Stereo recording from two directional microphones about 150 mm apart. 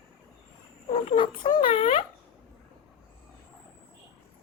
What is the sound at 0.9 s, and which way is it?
Speech, 45° left (ahead or behind).